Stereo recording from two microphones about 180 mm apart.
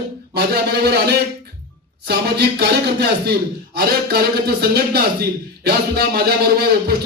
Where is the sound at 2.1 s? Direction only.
65° right (ahead or behind).